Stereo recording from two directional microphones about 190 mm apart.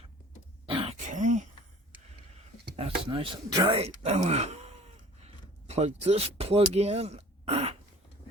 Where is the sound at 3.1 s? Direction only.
25° right (ahead or behind).